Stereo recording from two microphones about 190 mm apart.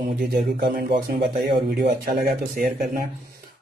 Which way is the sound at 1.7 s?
55° right (ahead or behind).